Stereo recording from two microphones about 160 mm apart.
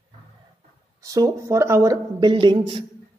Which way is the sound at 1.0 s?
20° right (ahead or behind).